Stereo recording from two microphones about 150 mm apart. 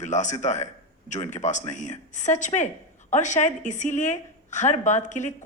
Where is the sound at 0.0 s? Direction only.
55° left (ahead or behind).